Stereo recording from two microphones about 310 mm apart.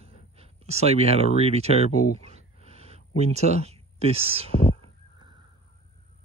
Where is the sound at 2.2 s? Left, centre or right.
Centre.